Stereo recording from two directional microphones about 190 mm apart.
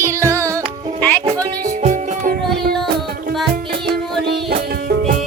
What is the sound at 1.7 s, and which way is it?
Music, 45° right (ahead or behind).